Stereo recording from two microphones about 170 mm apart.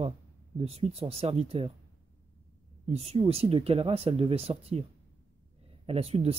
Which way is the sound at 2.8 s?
40° right (ahead or behind).